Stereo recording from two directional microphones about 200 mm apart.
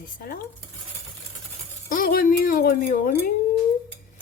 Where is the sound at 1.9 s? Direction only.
45° left (ahead or behind).